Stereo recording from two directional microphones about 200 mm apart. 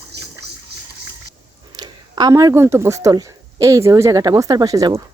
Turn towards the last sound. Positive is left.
turn(degrees=-20)  # may be behind; listen again after turning